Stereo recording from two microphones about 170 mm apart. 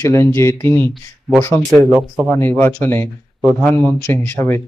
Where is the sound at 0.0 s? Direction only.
15° left (ahead or behind).